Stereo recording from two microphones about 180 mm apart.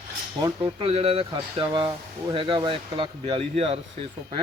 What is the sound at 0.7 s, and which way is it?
Speech, 30° right (ahead or behind).